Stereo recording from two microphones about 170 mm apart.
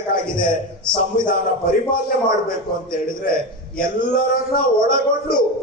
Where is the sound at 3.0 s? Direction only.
55° left (ahead or behind).